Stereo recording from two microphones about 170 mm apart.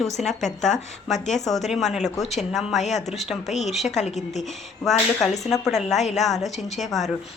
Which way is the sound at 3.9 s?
40° left (ahead or behind).